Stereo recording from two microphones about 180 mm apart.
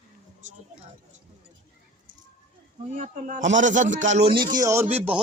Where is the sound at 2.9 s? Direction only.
45° right (ahead or behind).